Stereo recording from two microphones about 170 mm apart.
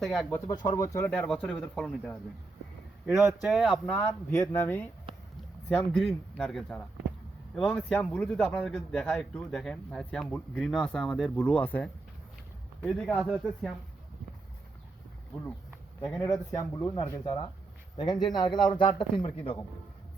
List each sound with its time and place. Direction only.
0.0 s a man's voice: centre (ahead or behind)
0.3 s speech: 20° left (ahead or behind)
0.9 s a man's voice: 10° left (ahead or behind)
3.4 s a man's voice: 5° right (ahead or behind)
16.0 s speech: 10° left (ahead or behind)
16.9 s speech: 30° left (ahead or behind)